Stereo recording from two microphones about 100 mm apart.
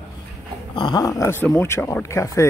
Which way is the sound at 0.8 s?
45° left (ahead or behind).